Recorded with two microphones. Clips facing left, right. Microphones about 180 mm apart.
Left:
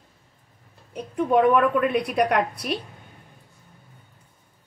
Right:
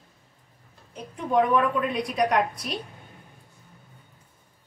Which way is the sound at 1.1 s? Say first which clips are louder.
Left 4 dB; 60° left (ahead or behind).